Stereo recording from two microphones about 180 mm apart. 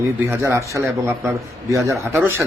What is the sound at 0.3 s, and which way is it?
A man's voice, 15° right (ahead or behind).